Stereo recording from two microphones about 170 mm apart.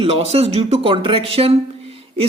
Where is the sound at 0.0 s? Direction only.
35° right (ahead or behind).